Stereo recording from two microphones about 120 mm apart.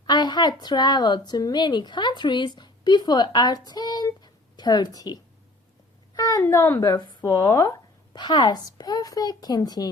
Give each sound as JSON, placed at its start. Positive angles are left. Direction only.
{"t": 0.0, "sound": "a child's voice", "side_deg": 40}
{"t": 6.4, "sound": "a woman's voice", "side_deg": 20}